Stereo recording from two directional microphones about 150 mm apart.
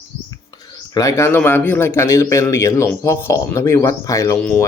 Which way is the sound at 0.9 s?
20° left (ahead or behind).